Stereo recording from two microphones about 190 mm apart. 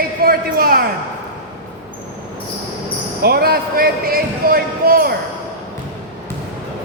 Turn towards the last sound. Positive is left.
turn(degrees=-50)  # may be behind; listen again after turning